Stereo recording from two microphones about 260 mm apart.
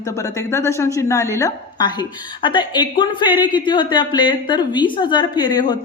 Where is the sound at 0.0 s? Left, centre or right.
Centre.